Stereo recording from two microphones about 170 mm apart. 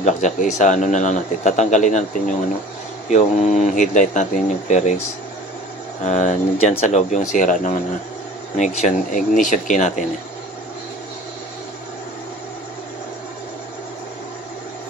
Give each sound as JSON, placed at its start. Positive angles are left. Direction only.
{"t": 0.0, "sound": "a man's voice", "side_deg": 45}
{"t": 6.0, "sound": "a man's voice", "side_deg": 45}